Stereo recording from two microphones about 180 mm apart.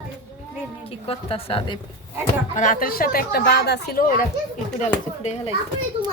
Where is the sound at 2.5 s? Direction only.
45° left (ahead or behind).